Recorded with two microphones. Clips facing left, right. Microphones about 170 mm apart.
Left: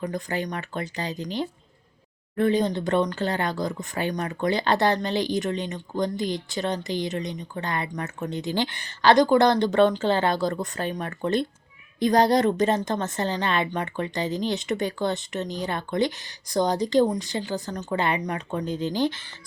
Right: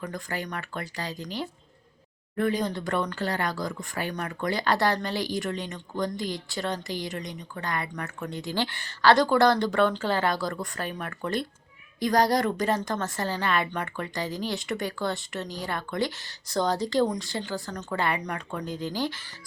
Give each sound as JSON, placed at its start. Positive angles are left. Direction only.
{"t": 0.0, "sound": "speech", "side_deg": 20}